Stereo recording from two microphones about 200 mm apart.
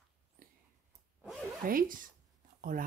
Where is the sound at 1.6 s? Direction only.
45° right (ahead or behind).